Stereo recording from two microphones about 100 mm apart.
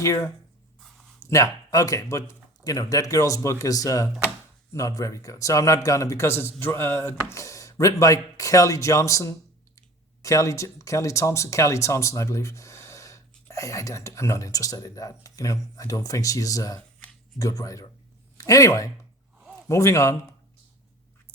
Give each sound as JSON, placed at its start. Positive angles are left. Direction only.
{"t": 0.0, "sound": "a man's voice", "side_deg": 30}